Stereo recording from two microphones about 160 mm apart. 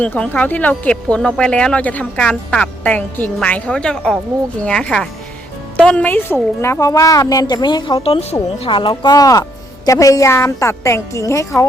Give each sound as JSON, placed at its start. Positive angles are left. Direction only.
{"t": 0.0, "sound": "a woman's voice", "side_deg": 10}